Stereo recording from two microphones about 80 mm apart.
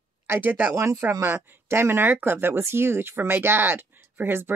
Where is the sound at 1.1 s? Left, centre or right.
Right.